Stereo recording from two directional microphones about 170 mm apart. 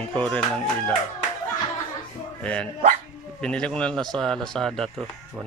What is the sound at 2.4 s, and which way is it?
Speech, 5° left (ahead or behind).